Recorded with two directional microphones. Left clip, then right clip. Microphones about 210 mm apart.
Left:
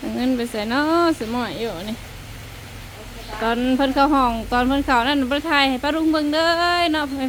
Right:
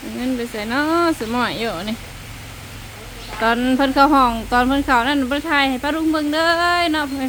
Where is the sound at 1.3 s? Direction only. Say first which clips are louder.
Right 4 dB; 10° right (ahead or behind).